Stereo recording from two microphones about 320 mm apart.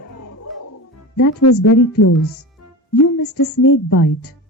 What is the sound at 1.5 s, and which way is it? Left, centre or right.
Speech, left.